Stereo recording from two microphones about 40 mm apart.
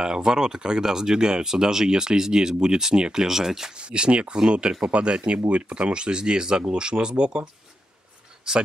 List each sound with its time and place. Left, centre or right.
0.0 s speech: centre
3.7 s speech: right